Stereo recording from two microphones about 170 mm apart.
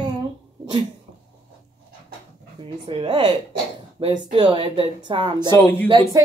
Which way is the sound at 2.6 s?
30° right (ahead or behind).